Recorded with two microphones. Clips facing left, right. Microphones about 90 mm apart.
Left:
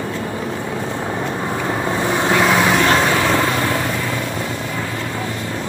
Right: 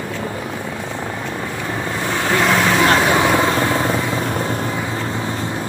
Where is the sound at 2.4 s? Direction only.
5° left (ahead or behind).